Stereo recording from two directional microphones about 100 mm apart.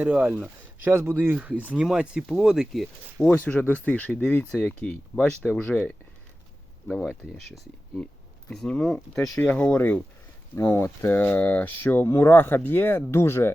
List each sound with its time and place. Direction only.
0.0 s speech: 15° right (ahead or behind); by 3.3 s 5° left (ahead or behind)
3.3 s speech: 15° left (ahead or behind)
10.6 s speech: 30° left (ahead or behind)